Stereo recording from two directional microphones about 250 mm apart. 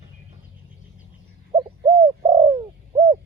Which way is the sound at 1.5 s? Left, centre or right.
Centre.